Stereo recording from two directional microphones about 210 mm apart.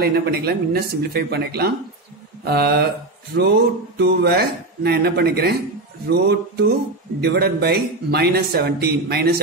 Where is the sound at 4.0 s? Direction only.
50° right (ahead or behind).